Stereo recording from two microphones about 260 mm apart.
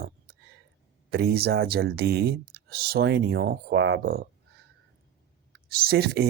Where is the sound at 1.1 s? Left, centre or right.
Right.